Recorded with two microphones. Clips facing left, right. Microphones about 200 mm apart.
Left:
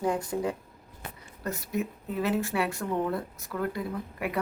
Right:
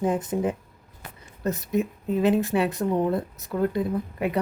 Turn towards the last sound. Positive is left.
turn(degrees=-25)  # may be behind; listen again after turning